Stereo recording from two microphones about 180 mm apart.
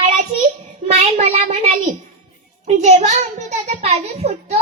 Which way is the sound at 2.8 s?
40° right (ahead or behind).